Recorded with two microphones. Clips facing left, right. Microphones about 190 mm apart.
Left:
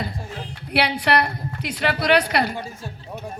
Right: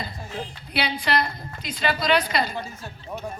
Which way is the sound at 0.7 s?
65° left (ahead or behind).